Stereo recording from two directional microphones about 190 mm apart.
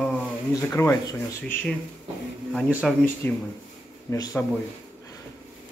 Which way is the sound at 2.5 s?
Centre (ahead or behind).